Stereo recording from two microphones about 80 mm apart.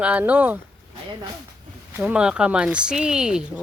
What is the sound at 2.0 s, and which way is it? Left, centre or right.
Speech, centre.